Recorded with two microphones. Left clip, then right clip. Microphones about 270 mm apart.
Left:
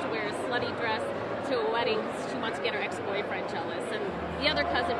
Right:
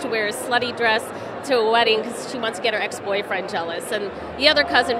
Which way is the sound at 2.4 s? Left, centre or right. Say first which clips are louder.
Right 10 dB; right.